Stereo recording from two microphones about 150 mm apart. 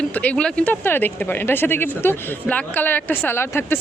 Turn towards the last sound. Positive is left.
turn(degrees=15)  # may be behind; listen again after turning